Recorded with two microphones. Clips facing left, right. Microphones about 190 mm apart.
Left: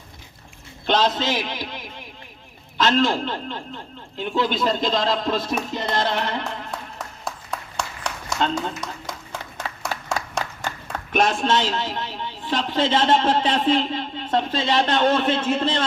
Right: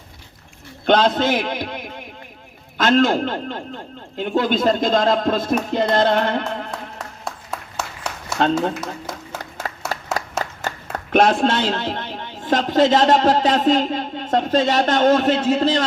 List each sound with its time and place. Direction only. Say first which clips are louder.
0.9 s a man's voice: right 5 dB; 55° right (ahead or behind)
7.3 s a sound: even; 5° right (ahead or behind)
11.1 s a man's voice: right 4 dB; 60° right (ahead or behind); by 15.8 s 40° right (ahead or behind)